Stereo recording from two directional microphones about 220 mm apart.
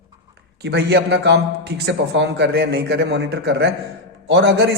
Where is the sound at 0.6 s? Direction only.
50° right (ahead or behind).